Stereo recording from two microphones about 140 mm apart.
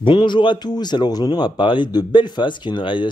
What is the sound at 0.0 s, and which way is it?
Speech, 35° left (ahead or behind).